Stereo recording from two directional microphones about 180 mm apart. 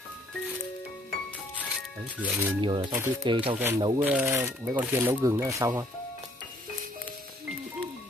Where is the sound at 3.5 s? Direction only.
15° right (ahead or behind).